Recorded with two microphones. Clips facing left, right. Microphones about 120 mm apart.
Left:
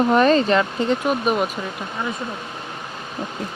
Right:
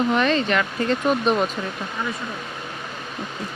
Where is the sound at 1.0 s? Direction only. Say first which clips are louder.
Even; 5° left (ahead or behind).